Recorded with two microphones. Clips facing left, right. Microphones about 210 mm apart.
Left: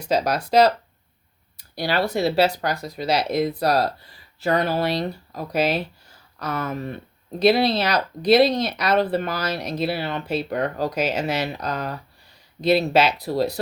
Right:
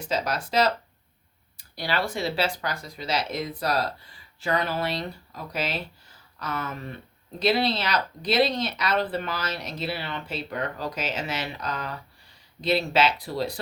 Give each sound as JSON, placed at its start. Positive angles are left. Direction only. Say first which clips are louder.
{"t": 0.0, "sound": "speech", "louder": "left 6 dB", "side_deg": 40}
{"t": 1.8, "sound": "speech", "louder": "left 6 dB", "side_deg": 40}
{"t": 5.5, "sound": "speech", "louder": "left 9 dB", "side_deg": 55}